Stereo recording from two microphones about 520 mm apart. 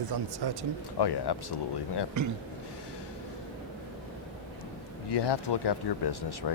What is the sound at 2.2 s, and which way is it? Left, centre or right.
Speech, right.